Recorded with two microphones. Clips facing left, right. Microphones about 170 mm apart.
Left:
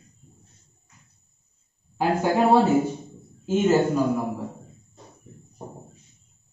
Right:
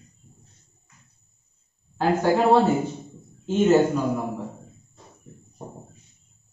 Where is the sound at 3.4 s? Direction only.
5° left (ahead or behind).